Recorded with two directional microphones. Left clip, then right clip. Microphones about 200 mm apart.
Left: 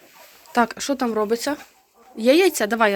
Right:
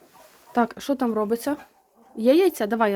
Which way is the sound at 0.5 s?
10° right (ahead or behind).